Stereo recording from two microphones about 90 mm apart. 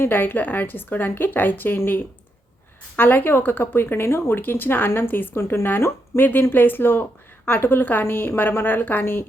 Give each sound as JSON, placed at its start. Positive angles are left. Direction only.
{"t": 0.0, "sound": "speech", "side_deg": 20}